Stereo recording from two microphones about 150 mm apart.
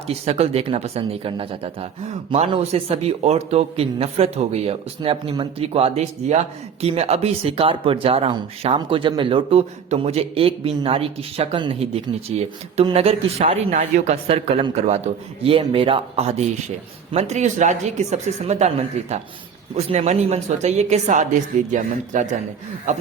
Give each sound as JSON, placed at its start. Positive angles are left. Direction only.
{"t": 0.1, "sound": "a man's voice", "side_deg": -45}